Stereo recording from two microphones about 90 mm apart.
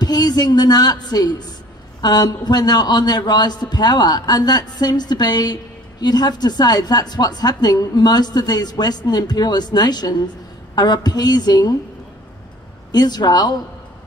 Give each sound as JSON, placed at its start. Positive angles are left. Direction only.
{"t": 0.0, "sound": "a man's voice", "side_deg": 50}
{"t": 12.9, "sound": "a man's voice", "side_deg": 50}